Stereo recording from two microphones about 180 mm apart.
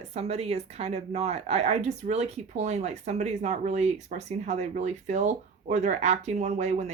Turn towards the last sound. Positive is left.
turn(degrees=-40)  # may be behind; listen again after turning